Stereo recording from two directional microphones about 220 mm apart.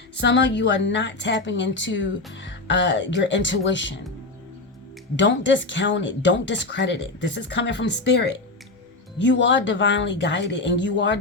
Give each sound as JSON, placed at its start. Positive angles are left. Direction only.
{"t": 0.2, "sound": "a woman's voice", "side_deg": 55}
{"t": 5.1, "sound": "a woman's voice", "side_deg": 55}